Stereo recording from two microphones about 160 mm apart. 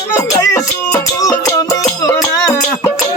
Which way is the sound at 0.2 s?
20° left (ahead or behind).